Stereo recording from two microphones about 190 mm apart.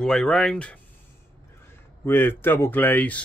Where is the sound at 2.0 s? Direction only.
10° left (ahead or behind).